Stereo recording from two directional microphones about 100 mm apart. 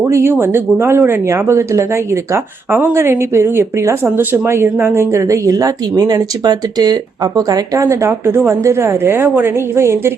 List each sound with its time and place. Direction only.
0.0 s speech: 25° right (ahead or behind)